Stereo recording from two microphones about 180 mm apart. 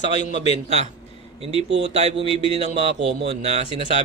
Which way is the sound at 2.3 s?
30° left (ahead or behind).